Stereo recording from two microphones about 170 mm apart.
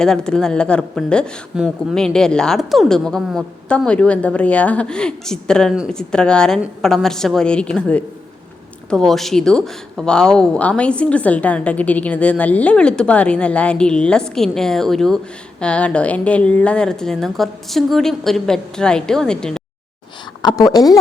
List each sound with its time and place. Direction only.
0.0 s speech: 5° left (ahead or behind)
20.4 s a woman's voice: 25° left (ahead or behind)